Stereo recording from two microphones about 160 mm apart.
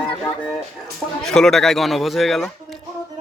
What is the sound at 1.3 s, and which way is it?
Speech, 5° left (ahead or behind).